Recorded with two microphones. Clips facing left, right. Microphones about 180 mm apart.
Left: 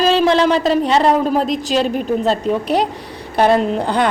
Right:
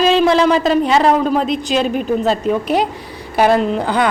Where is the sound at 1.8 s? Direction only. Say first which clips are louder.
Right 1 dB; centre (ahead or behind).